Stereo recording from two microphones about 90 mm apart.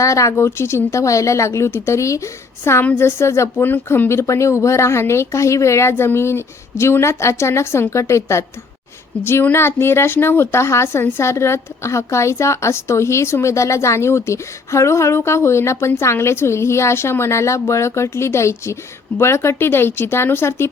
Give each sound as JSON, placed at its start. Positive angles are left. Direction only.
{"t": 0.0, "sound": "a woman's voice", "side_deg": 35}